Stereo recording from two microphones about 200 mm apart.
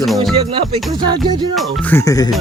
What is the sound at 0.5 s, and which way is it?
Music, 20° right (ahead or behind).